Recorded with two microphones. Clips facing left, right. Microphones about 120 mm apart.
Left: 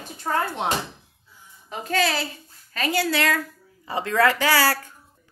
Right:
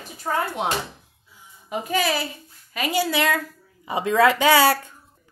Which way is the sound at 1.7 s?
15° right (ahead or behind).